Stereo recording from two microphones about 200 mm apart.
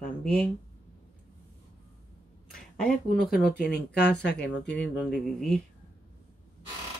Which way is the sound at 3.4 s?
50° left (ahead or behind).